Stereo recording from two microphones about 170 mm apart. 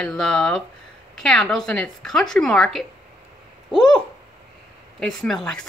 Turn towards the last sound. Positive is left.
turn(degrees=5)  # may be behind; listen again after turning